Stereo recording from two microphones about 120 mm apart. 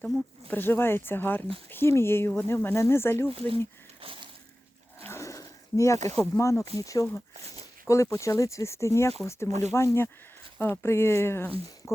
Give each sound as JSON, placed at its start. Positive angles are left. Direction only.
{"t": 0.5, "sound": "speech", "side_deg": 15}
{"t": 3.3, "sound": "speech", "side_deg": -50}
{"t": 4.0, "sound": "a sound", "side_deg": -45}
{"t": 5.0, "sound": "a sound", "side_deg": 25}
{"t": 6.1, "sound": "speech", "side_deg": 25}
{"t": 9.5, "sound": "speech", "side_deg": -70}
{"t": 9.7, "sound": "speech", "side_deg": 20}